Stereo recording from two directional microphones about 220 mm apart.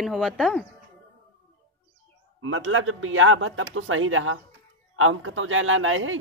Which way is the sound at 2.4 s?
65° right (ahead or behind).